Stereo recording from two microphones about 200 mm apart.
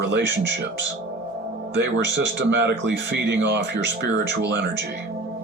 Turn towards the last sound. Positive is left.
turn(degrees=-60)  # may be behind; listen again after turning